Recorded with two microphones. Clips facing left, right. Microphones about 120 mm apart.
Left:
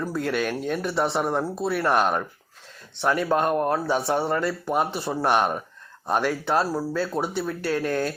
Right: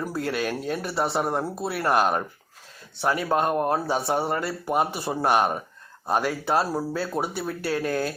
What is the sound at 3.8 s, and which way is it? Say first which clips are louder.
Speech: left 1 dB; 35° right (ahead or behind).